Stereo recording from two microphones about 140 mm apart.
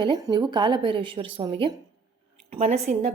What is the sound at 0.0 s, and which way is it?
A woman's voice, 30° right (ahead or behind).